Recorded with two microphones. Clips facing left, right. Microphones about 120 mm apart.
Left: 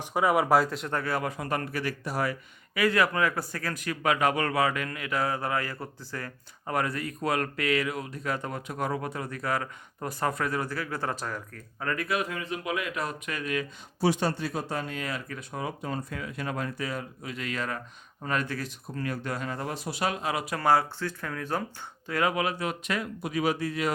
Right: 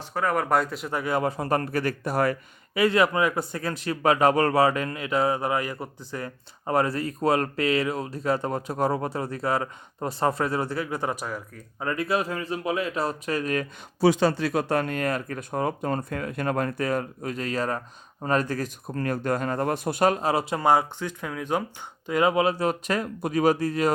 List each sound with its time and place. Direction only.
0.0 s speech: 15° left (ahead or behind); by 1.0 s 5° right (ahead or behind)
1.0 s speech: 25° right (ahead or behind); by 2.4 s 50° right (ahead or behind)
2.7 s a man's voice: 25° right (ahead or behind); by 11.6 s 10° right (ahead or behind)
11.8 s speech: 25° right (ahead or behind); by 13.7 s 40° right (ahead or behind)
14.2 s speech: 90° right; by 23.9 s 40° right (ahead or behind)